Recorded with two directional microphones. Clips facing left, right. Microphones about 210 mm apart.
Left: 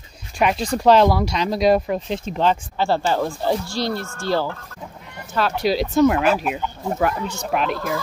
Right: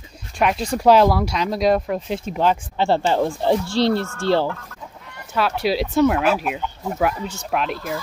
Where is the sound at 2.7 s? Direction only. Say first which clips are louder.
Right 2 dB; 20° right (ahead or behind).